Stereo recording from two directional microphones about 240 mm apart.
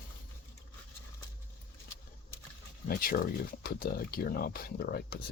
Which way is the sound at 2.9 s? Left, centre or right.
Left.